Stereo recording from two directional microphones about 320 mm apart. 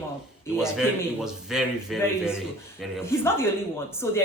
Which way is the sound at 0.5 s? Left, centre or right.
Centre.